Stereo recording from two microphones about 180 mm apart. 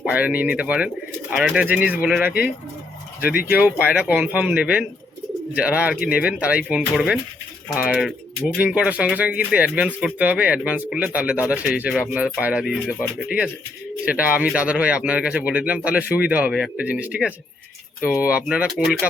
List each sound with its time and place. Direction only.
0.0 s speech: 10° right (ahead or behind)
3.5 s speech: 10° right (ahead or behind)
8.5 s speech: 5° right (ahead or behind)